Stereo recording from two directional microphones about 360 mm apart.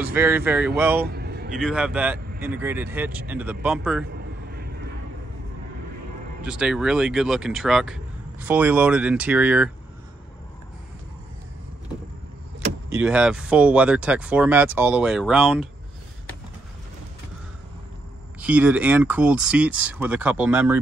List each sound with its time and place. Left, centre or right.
0.1 s speech: centre
1.0 s a sound: right
1.6 s speech: centre
4.1 s vehicle: right
6.4 s speech: centre
12.9 s speech: centre
18.4 s speech: centre